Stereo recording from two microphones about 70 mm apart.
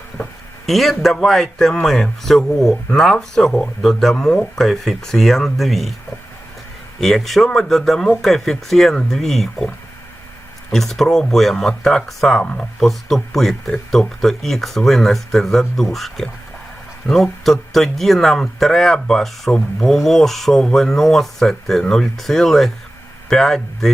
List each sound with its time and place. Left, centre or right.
0.6 s speech: centre
7.0 s speech: centre
10.7 s speech: centre
12.4 s speech: centre
12.8 s speech: centre